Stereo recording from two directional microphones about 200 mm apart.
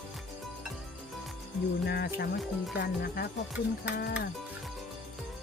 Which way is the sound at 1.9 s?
55° left (ahead or behind).